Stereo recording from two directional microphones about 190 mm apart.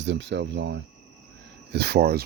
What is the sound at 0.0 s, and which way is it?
Speech, 70° right (ahead or behind).